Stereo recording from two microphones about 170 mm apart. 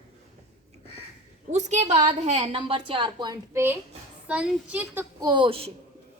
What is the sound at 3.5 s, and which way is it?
A child's voice, 15° right (ahead or behind).